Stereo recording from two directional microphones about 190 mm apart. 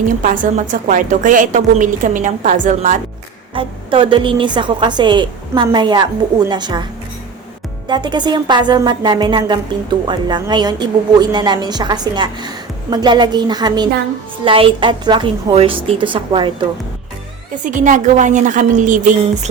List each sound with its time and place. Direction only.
0.2 s a woman's voice: 45° right (ahead or behind)
3.5 s a woman's voice: 25° right (ahead or behind)
7.9 s a woman's voice: 25° right (ahead or behind)
17.5 s a woman's voice: 45° right (ahead or behind)